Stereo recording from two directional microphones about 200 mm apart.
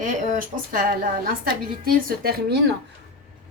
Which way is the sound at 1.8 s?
50° right (ahead or behind).